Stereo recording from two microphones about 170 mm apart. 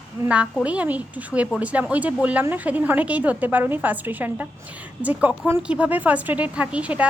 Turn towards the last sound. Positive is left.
turn(degrees=-10)  # may be behind; listen again after turning